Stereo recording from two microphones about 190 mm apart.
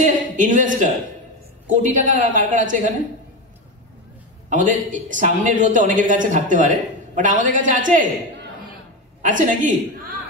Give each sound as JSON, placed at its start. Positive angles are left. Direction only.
{"t": 0.0, "sound": "a woman's voice", "side_deg": -40}
{"t": 4.5, "sound": "speech", "side_deg": -40}
{"t": 9.2, "sound": "speech", "side_deg": -45}